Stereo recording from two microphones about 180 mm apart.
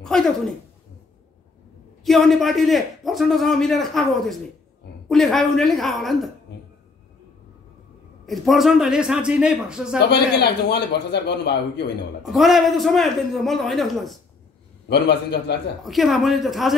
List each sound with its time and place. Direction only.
0.0 s a sound: 5° left (ahead or behind)
2.0 s a man's voice: centre (ahead or behind)
8.3 s a man's voice: centre (ahead or behind)
9.9 s a man's voice: 65° left (ahead or behind)
12.2 s a man's voice: centre (ahead or behind)
14.9 s a man's voice: 65° left (ahead or behind)
15.8 s a man's voice: centre (ahead or behind)